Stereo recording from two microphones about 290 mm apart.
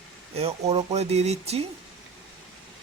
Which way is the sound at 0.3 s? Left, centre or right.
Right.